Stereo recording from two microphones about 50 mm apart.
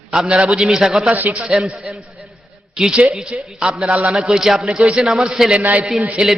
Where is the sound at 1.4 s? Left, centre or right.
Centre.